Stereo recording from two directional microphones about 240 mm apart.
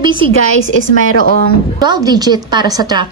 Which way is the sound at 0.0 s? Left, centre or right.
Centre.